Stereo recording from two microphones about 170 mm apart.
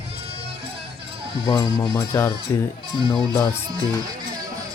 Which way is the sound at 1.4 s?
25° left (ahead or behind).